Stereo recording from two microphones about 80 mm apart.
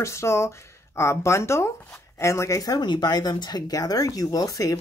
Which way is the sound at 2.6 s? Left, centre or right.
Left.